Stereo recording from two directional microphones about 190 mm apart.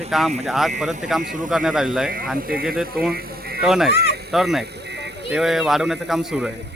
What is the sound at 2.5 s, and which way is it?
Speech, 50° right (ahead or behind).